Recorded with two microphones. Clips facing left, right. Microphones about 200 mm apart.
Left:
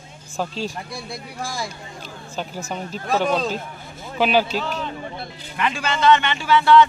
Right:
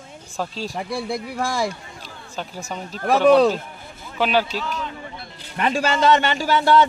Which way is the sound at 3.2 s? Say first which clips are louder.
Right 13 dB; 70° right (ahead or behind).